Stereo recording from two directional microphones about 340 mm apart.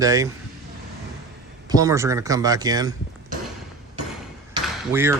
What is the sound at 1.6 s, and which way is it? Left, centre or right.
Speech, centre.